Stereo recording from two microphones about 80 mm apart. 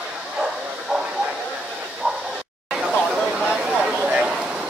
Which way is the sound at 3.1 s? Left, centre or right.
Centre.